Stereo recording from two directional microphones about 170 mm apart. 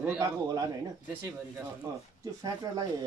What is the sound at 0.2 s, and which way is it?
Speech, 20° right (ahead or behind).